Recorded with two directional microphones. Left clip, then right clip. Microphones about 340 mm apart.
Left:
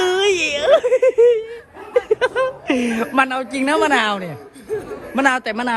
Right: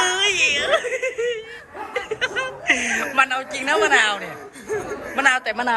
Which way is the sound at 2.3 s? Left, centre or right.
Centre.